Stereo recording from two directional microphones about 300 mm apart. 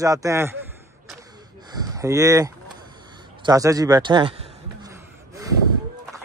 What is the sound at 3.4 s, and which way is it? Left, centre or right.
A man's voice, centre.